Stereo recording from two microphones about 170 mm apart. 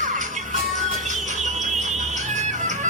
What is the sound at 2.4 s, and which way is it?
Bagpipes, 45° right (ahead or behind).